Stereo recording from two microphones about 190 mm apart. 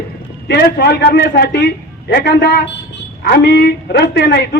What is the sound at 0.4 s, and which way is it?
A man's voice, 60° left (ahead or behind).